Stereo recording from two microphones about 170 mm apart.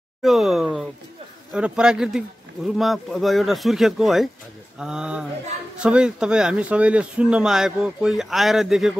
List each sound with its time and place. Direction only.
0.2 s speech: centre (ahead or behind)